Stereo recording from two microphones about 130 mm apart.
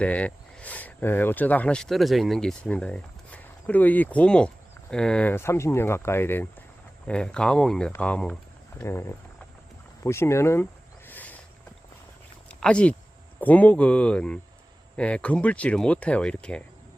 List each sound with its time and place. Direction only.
0.0 s speech: 10° left (ahead or behind)
8.8 s speech: 20° left (ahead or behind)
10.0 s a sound: 20° left (ahead or behind)
12.5 s speech: 5° left (ahead or behind)